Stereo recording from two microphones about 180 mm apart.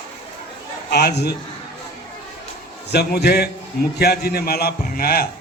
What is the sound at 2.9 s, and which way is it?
A man's voice, 65° left (ahead or behind).